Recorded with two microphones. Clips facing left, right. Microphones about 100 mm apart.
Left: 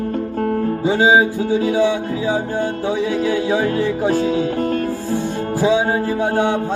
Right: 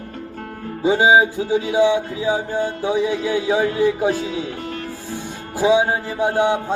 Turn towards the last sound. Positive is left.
turn(degrees=-15)  # may be behind; listen again after turning